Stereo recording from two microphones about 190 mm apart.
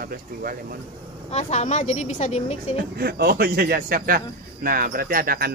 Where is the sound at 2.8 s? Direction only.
55° right (ahead or behind).